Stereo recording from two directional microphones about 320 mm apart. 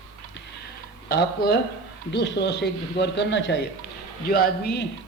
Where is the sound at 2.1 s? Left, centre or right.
Left.